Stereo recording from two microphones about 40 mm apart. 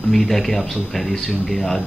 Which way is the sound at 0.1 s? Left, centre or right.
Centre.